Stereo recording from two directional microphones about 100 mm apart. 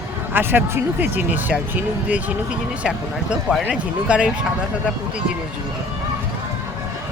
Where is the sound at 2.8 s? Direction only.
5° right (ahead or behind).